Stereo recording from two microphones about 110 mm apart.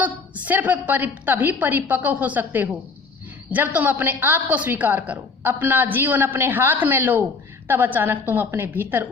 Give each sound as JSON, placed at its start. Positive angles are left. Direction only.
{"t": 0.0, "sound": "a woman's voice", "side_deg": -15}